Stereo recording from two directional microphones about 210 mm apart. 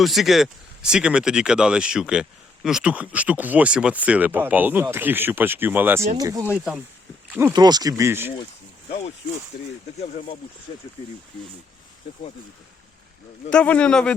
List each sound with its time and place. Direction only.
0.0 s speech: centre (ahead or behind)
13.5 s speech: 5° left (ahead or behind)